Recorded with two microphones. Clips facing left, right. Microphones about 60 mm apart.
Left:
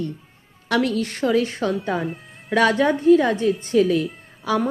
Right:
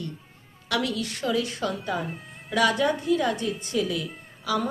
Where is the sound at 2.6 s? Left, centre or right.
Left.